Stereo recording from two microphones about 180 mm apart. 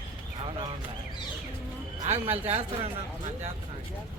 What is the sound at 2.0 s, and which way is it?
A man's voice, 35° right (ahead or behind).